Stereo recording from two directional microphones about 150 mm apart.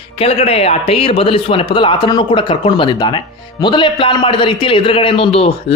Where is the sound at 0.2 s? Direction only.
40° left (ahead or behind).